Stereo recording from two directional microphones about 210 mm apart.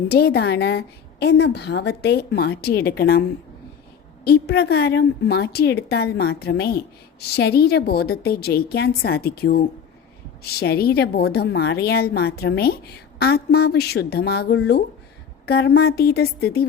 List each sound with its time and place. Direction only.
0.1 s a woman's voice: 50° left (ahead or behind)